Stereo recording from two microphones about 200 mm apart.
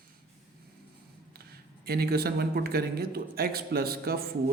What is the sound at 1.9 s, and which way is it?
A man's voice, 50° right (ahead or behind).